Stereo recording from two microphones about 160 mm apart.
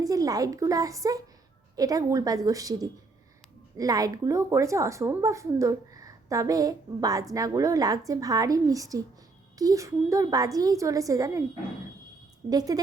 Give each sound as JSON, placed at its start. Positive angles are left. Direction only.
{"t": 0.0, "sound": "a woman's voice", "side_deg": -20}
{"t": 12.5, "sound": "a woman's voice", "side_deg": -25}